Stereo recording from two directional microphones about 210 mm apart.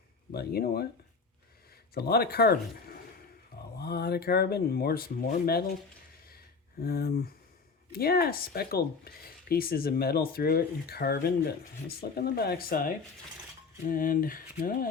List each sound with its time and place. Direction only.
0.3 s speech: 45° left (ahead or behind)
1.9 s speech: 50° left (ahead or behind)
6.3 s a sound: 45° left (ahead or behind)
7.9 s speech: 45° left (ahead or behind)